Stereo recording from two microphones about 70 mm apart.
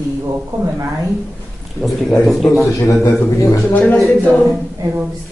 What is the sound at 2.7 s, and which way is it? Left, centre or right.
Speech, left.